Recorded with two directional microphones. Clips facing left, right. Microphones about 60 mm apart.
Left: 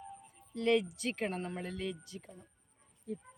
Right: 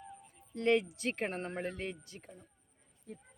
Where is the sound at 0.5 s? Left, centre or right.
Right.